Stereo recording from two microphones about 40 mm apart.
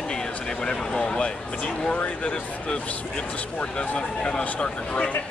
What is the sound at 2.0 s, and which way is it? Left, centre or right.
Speech, left.